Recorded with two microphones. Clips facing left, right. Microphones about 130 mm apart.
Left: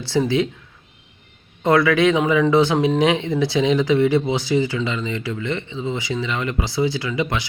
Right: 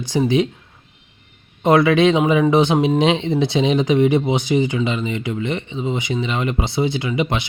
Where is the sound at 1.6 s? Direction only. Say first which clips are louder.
Right 2 dB; 20° right (ahead or behind).